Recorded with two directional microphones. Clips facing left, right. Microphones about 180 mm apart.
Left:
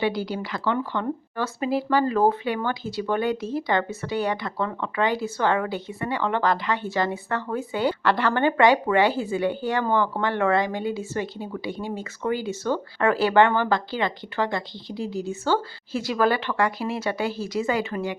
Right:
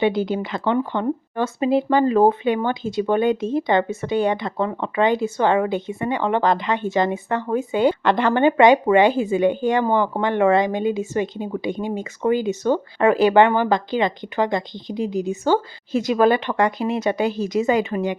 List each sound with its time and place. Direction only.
0.0 s speech: 20° right (ahead or behind)